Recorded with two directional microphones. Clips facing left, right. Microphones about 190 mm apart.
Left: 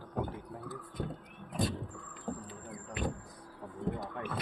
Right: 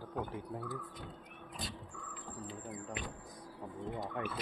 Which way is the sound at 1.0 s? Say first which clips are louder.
Left 10 dB; 55° left (ahead or behind).